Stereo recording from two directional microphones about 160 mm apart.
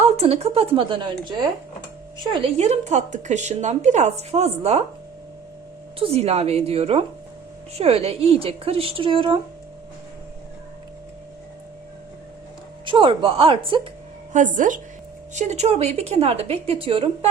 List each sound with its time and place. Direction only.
0.0 s a woman's voice: 40° right (ahead or behind)
2.3 s a woman's voice: 40° right (ahead or behind)
6.0 s a woman's voice: 40° right (ahead or behind)
12.8 s a woman's voice: 30° right (ahead or behind)
14.3 s a woman's voice: 55° right (ahead or behind); by 17.1 s 35° right (ahead or behind)